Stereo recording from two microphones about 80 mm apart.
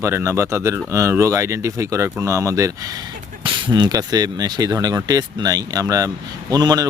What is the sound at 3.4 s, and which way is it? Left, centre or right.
Speech, right.